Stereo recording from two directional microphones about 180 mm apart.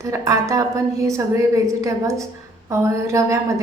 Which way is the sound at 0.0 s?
15° right (ahead or behind).